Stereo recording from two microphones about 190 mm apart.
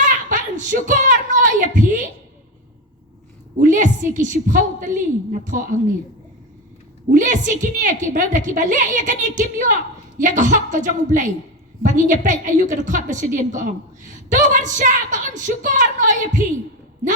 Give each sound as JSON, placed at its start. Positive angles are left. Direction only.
{"t": 0.3, "sound": "a sound", "side_deg": -40}
{"t": 3.6, "sound": "a woman's voice", "side_deg": -40}
{"t": 7.1, "sound": "a woman's voice", "side_deg": -40}